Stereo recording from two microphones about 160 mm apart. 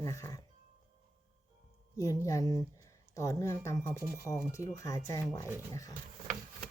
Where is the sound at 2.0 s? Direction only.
20° left (ahead or behind).